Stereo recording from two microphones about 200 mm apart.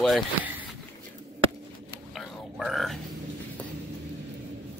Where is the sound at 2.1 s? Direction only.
Centre (ahead or behind).